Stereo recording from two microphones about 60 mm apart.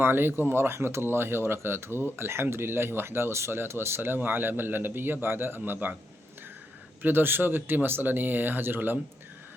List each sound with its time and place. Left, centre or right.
0.0 s speech: right
7.0 s speech: right